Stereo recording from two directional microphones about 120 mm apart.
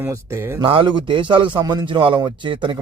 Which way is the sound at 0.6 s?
45° right (ahead or behind).